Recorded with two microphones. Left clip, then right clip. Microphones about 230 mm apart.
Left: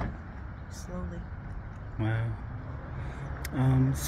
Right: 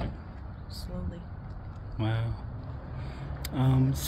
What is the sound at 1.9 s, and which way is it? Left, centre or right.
Speech, centre.